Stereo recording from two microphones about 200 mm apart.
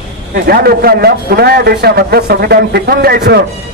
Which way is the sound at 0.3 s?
50° right (ahead or behind).